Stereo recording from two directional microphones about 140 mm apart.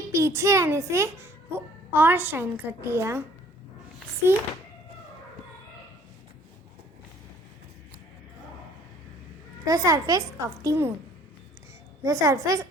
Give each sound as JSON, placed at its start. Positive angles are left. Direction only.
{"t": 0.1, "sound": "a child's voice", "side_deg": -20}
{"t": 4.3, "sound": "speech", "side_deg": -15}
{"t": 9.6, "sound": "a child's voice", "side_deg": -25}
{"t": 12.0, "sound": "a child's voice", "side_deg": -25}